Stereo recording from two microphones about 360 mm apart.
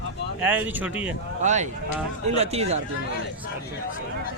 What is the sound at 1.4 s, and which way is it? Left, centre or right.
Speech, centre.